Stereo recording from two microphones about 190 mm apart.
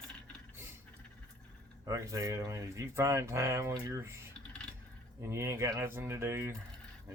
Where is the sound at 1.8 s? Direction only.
15° right (ahead or behind).